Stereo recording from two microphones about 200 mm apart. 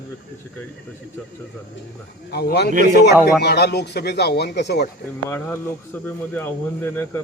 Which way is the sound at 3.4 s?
55° left (ahead or behind).